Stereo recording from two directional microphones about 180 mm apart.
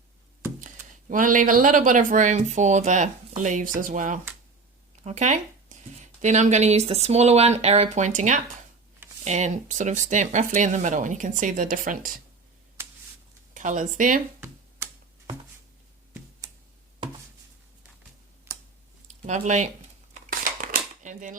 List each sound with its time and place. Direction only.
1.1 s speech: 45° right (ahead or behind)
13.5 s speech: 45° right (ahead or behind)
18.5 s a sound: 15° right (ahead or behind)
19.2 s speech: 40° right (ahead or behind)
20.4 s dishes: 45° right (ahead or behind)